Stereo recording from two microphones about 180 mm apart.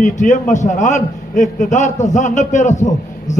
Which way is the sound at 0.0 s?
45° left (ahead or behind).